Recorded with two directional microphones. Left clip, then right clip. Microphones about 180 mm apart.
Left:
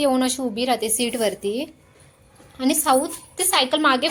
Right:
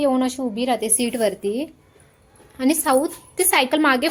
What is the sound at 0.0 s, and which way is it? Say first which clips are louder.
A woman's voice: even; 10° right (ahead or behind).